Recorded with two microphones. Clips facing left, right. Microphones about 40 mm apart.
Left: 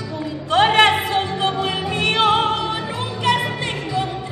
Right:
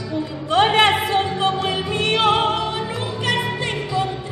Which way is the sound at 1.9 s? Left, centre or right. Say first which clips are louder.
Left 1 dB; left.